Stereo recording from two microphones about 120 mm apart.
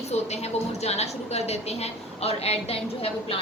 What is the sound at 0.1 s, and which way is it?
A woman's voice, 65° left (ahead or behind).